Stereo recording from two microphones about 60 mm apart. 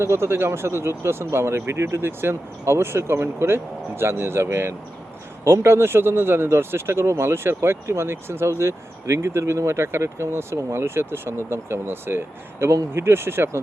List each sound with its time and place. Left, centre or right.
0.0 s speech: right